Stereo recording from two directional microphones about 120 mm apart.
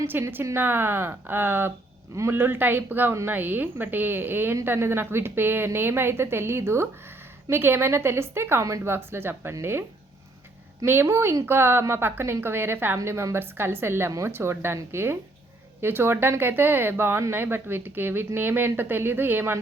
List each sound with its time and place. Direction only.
0.0 s a woman's voice: 20° right (ahead or behind)
10.8 s a woman's voice: 20° right (ahead or behind)